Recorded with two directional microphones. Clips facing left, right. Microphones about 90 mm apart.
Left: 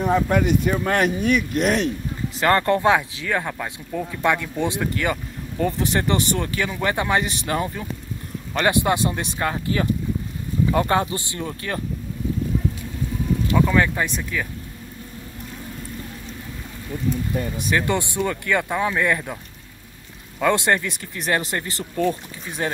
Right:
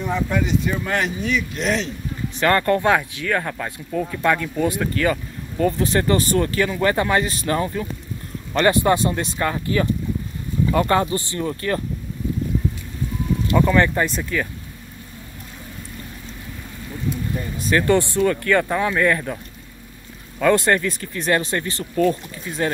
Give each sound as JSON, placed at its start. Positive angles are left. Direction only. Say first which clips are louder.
{"t": 0.0, "sound": "speech", "louder": "left 3 dB", "side_deg": 50}
{"t": 2.4, "sound": "speech", "louder": "even", "side_deg": 25}
{"t": 13.6, "sound": "speech", "louder": "right 3 dB", "side_deg": 0}
{"t": 17.6, "sound": "speech", "louder": "right 6 dB", "side_deg": 15}
{"t": 20.3, "sound": "speech", "louder": "right 2 dB", "side_deg": 20}